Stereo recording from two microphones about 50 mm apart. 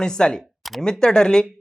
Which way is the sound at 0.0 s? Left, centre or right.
Centre.